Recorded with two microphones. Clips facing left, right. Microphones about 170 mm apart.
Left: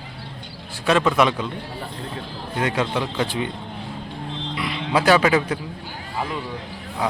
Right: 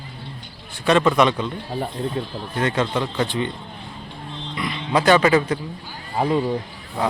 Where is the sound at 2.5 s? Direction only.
10° left (ahead or behind).